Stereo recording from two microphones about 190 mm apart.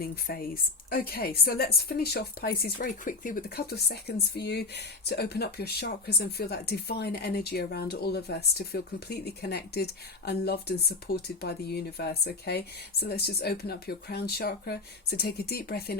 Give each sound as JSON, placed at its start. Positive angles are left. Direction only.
{"t": 0.0, "sound": "a woman's voice", "side_deg": 50}